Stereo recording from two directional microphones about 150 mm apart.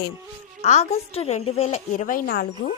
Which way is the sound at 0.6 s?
45° left (ahead or behind).